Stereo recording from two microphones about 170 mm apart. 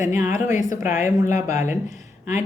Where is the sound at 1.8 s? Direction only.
45° left (ahead or behind).